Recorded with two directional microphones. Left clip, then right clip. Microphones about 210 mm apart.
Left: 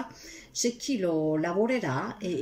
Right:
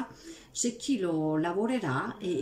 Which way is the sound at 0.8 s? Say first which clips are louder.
Left 1 dB; 15° right (ahead or behind).